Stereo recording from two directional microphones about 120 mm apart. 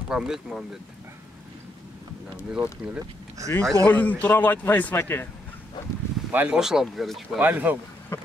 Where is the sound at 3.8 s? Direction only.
15° left (ahead or behind).